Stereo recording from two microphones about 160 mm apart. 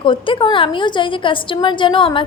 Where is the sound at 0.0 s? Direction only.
30° left (ahead or behind).